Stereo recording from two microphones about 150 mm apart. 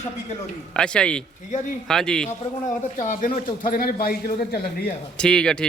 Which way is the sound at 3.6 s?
70° left (ahead or behind).